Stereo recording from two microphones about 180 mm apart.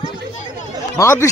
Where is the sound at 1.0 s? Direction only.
15° left (ahead or behind).